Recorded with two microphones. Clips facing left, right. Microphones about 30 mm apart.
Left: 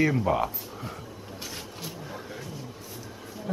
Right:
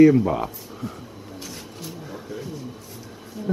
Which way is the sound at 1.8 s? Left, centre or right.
Centre.